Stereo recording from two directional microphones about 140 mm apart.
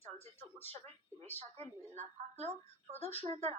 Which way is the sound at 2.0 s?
50° right (ahead or behind).